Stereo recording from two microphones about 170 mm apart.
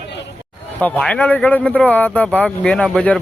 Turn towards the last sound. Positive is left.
turn(degrees=5)  # may be behind; listen again after turning